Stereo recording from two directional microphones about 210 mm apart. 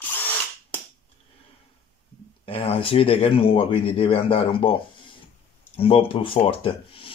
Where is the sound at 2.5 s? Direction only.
25° left (ahead or behind).